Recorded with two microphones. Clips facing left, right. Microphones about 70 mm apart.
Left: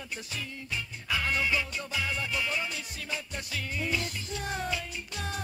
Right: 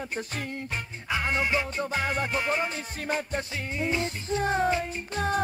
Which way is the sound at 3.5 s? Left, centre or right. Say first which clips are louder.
Right 1 dB; right.